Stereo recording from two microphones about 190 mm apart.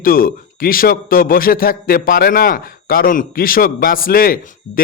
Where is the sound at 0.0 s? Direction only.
50° left (ahead or behind).